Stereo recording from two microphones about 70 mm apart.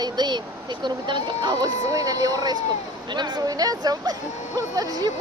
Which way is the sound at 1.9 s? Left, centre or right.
Right.